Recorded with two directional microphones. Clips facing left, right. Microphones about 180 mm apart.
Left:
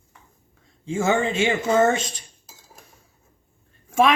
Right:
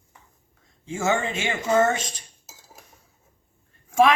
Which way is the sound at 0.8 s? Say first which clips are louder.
Left 3 dB; 30° left (ahead or behind).